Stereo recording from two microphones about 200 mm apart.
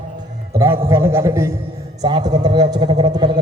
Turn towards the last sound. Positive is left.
turn(degrees=-25)  # may be behind; listen again after turning